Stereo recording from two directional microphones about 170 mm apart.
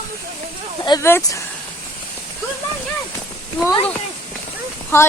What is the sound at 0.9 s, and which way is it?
Speech, 15° left (ahead or behind).